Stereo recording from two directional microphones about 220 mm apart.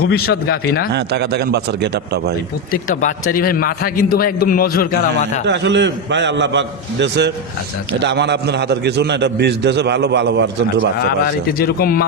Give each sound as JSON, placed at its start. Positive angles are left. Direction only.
{"t": 0.0, "sound": "a man's voice", "side_deg": 45}
{"t": 0.9, "sound": "a man's voice", "side_deg": -50}
{"t": 2.9, "sound": "a man's voice", "side_deg": 35}
{"t": 5.5, "sound": "a man's voice", "side_deg": -55}
{"t": 10.9, "sound": "a man's voice", "side_deg": 45}